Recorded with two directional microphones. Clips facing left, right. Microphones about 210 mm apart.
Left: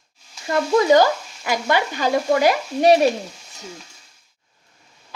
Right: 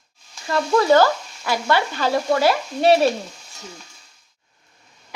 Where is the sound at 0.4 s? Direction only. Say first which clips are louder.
Left 1 dB; 15° left (ahead or behind).